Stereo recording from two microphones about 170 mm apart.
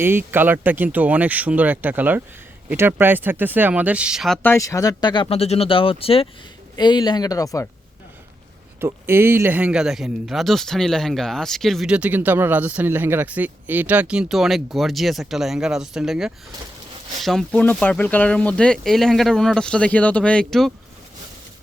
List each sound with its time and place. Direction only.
0.0 s speech: 15° right (ahead or behind)
4.4 s speech: 15° left (ahead or behind)
8.8 s speech: 15° right (ahead or behind); by 20.7 s centre (ahead or behind)